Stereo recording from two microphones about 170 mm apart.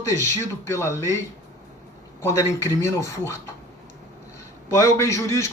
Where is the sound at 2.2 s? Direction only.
15° left (ahead or behind).